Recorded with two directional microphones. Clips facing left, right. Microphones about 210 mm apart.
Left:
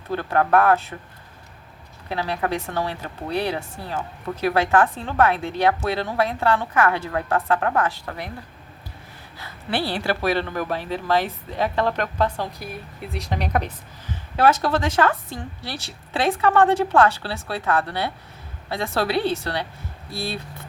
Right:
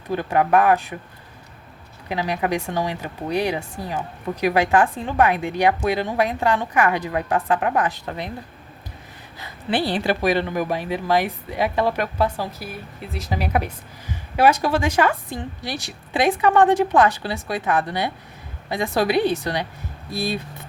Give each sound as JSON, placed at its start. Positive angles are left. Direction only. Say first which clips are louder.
{"t": 0.1, "sound": "a woman's voice", "louder": "right 1 dB", "side_deg": -15}
{"t": 2.0, "sound": "a woman's voice", "louder": "right 2 dB", "side_deg": -15}
{"t": 9.4, "sound": "a woman's voice", "louder": "right 3 dB", "side_deg": -15}